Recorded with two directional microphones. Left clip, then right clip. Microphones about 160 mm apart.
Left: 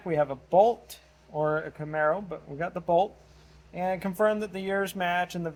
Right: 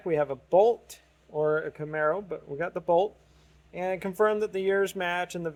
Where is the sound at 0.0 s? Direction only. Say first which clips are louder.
Even; 45° right (ahead or behind).